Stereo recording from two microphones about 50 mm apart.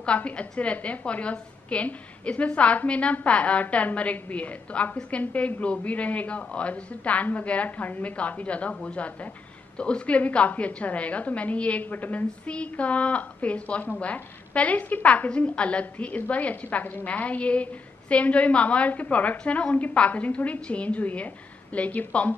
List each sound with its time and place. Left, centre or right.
0.0 s a woman's voice: left
15.2 s a woman's voice: left